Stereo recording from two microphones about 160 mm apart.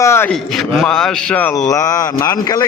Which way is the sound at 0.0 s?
15° left (ahead or behind).